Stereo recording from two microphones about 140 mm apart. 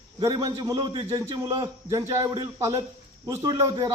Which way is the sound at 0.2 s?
25° right (ahead or behind).